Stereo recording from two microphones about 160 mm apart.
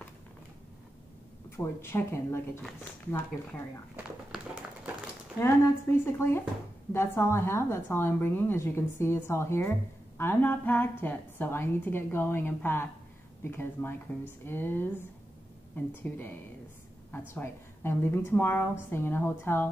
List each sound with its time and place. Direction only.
1.6 s a woman's voice: 15° left (ahead or behind)
3.9 s a sound: 5° right (ahead or behind)
5.4 s a woman's voice: 15° left (ahead or behind)